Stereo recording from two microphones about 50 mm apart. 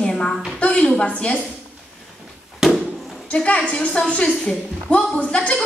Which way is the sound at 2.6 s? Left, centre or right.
Centre.